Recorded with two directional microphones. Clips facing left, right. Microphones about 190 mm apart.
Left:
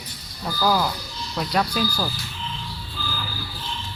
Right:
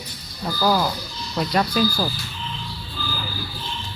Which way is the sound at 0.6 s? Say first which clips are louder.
Right 1 dB; 5° right (ahead or behind).